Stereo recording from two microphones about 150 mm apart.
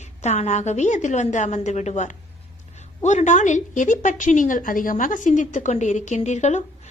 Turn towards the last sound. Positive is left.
turn(degrees=50)  # may be behind; listen again after turning